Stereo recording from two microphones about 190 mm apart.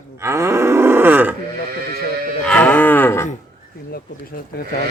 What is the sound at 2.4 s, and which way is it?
Moo, 5° left (ahead or behind).